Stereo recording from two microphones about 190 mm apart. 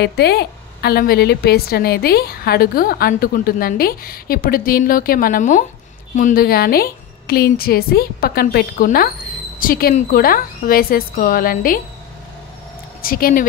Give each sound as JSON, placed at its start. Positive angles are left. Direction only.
{"t": 0.0, "sound": "a woman's voice", "side_deg": 60}
{"t": 13.0, "sound": "a woman's voice", "side_deg": 50}